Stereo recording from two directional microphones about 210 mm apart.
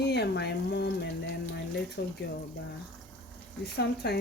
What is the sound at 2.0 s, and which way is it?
Speech, 55° left (ahead or behind).